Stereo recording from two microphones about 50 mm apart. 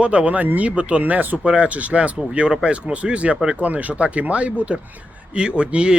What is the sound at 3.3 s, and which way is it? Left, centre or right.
Speech, centre.